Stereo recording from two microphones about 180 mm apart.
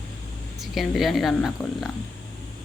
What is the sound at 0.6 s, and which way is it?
A woman's voice, centre (ahead or behind).